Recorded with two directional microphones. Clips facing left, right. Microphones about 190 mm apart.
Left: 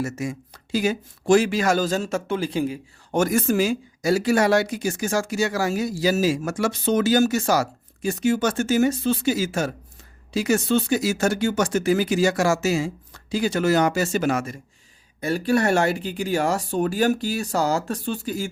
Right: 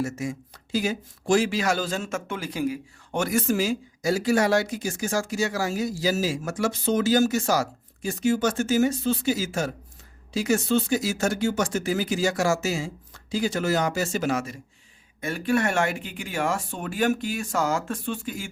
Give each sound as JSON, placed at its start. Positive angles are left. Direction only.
{"t": 0.0, "sound": "speech", "side_deg": 70}
{"t": 3.2, "sound": "speech", "side_deg": 50}
{"t": 15.2, "sound": "speech", "side_deg": 35}